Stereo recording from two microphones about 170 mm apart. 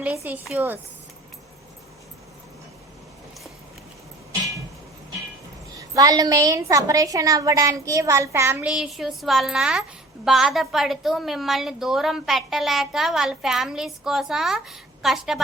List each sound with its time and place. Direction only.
0.3 s a woman's voice: 10° right (ahead or behind)
5.7 s a woman's voice: 20° right (ahead or behind); by 15.4 s centre (ahead or behind)